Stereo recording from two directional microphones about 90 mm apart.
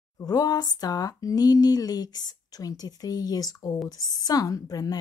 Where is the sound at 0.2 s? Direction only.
45° left (ahead or behind).